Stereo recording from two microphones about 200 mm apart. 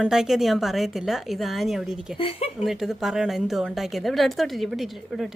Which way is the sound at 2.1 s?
30° left (ahead or behind).